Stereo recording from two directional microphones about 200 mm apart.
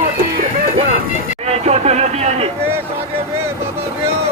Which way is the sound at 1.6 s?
35° right (ahead or behind).